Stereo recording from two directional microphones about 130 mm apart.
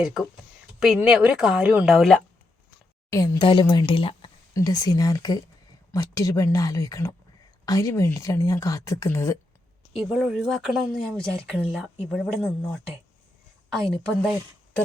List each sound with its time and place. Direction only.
0.0 s speech: centre (ahead or behind)
3.3 s speech: 35° left (ahead or behind)
4.5 s speech: 30° left (ahead or behind)
9.9 s speech: 5° right (ahead or behind)